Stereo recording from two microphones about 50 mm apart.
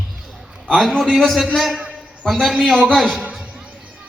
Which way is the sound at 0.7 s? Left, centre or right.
Centre.